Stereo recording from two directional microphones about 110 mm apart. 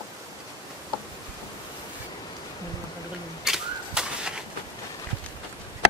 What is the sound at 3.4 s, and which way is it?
Bird, 5° right (ahead or behind).